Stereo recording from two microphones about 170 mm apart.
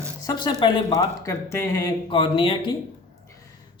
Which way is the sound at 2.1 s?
30° left (ahead or behind).